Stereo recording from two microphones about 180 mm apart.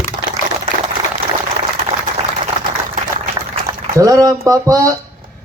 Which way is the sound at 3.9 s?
20° right (ahead or behind).